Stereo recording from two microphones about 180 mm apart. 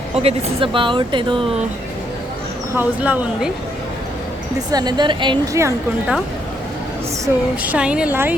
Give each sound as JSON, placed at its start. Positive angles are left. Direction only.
{"t": 0.2, "sound": "speech", "side_deg": -30}
{"t": 2.7, "sound": "speech", "side_deg": -10}
{"t": 4.7, "sound": "speech", "side_deg": -25}
{"t": 7.3, "sound": "speech", "side_deg": -15}